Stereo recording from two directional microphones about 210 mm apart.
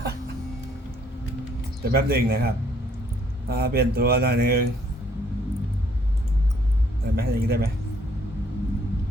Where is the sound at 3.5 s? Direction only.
50° right (ahead or behind).